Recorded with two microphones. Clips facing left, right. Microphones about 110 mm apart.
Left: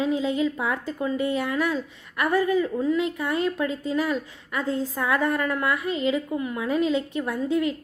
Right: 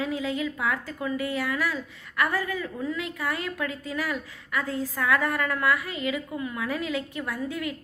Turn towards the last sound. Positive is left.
turn(degrees=25)  # may be behind; listen again after turning